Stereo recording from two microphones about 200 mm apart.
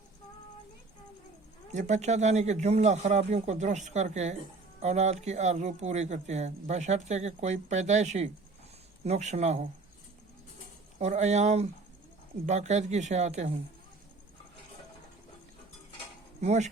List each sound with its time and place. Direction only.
1.7 s speech: 35° right (ahead or behind)
11.0 s speech: 35° right (ahead or behind)
16.4 s speech: 35° right (ahead or behind)